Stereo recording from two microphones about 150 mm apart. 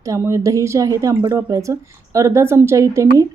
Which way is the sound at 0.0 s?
20° right (ahead or behind).